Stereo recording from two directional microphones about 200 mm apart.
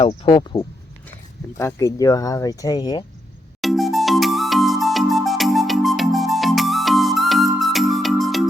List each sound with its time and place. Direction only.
0.0 s speech: 25° left (ahead or behind)
3.6 s music: centre (ahead or behind)